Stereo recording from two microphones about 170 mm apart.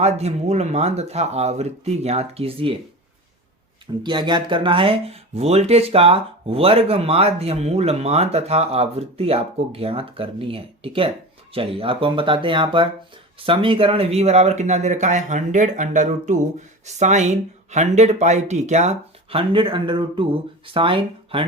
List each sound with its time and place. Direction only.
0.0 s speech: 40° right (ahead or behind)
4.0 s speech: 25° right (ahead or behind)